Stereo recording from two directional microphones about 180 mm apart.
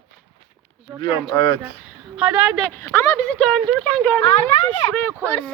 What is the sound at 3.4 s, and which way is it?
A woman's voice, 5° left (ahead or behind).